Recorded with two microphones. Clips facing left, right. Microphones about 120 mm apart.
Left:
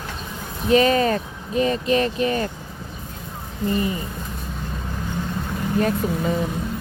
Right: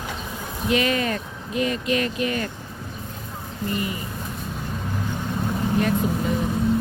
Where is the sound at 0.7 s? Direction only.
35° left (ahead or behind).